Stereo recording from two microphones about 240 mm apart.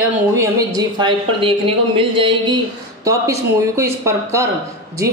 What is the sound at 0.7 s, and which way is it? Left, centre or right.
A woman's voice, centre.